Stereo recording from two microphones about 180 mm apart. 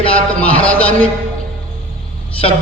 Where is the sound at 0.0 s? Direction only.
30° left (ahead or behind).